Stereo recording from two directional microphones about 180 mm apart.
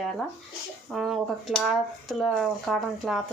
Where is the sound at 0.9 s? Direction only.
Centre (ahead or behind).